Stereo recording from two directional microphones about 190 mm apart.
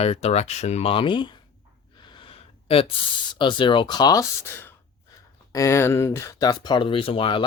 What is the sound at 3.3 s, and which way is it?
Speech, 25° left (ahead or behind).